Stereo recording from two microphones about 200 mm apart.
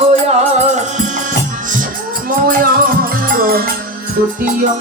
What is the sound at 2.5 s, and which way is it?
Music, 45° right (ahead or behind).